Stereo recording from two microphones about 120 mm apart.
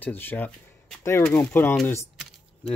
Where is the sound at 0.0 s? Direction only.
15° left (ahead or behind).